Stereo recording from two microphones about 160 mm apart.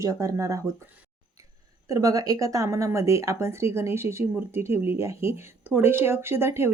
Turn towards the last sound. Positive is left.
turn(degrees=-15)  # may be behind; listen again after turning